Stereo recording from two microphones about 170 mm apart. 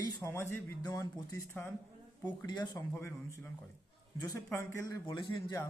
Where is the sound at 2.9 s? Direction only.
15° left (ahead or behind).